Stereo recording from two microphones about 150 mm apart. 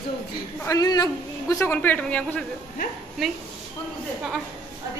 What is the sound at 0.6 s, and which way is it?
A man's voice, 25° left (ahead or behind).